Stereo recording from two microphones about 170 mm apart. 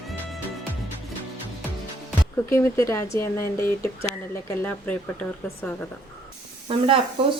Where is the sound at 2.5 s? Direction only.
15° left (ahead or behind).